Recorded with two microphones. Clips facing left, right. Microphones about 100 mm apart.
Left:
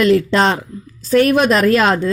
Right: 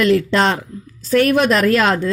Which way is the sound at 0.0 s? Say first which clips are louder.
Left 2 dB; 20° left (ahead or behind).